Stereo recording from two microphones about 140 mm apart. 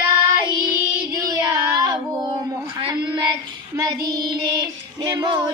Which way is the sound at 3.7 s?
25° right (ahead or behind).